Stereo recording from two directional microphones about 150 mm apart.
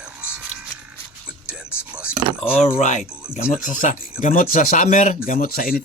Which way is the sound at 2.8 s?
55° left (ahead or behind).